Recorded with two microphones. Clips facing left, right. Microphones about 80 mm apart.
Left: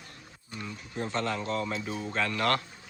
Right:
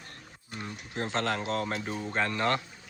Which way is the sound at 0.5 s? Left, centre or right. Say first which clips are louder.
Even; right.